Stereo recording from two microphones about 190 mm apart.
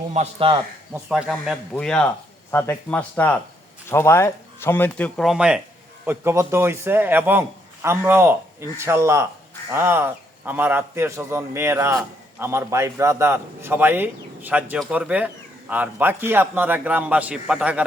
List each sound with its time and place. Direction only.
0.1 s speech: 30° right (ahead or behind)
1.0 s a man's voice: 5° right (ahead or behind)